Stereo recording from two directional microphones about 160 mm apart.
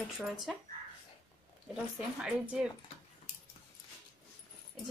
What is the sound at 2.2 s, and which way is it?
Speech, 5° right (ahead or behind).